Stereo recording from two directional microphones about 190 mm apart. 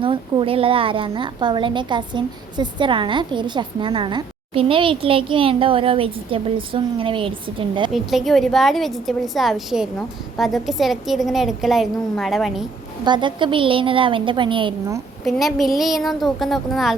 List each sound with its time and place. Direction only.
0.0 s a woman's voice: 25° right (ahead or behind)
7.9 s a woman's voice: centre (ahead or behind)
13.1 s a woman's voice: 25° right (ahead or behind)
15.2 s a woman's voice: centre (ahead or behind)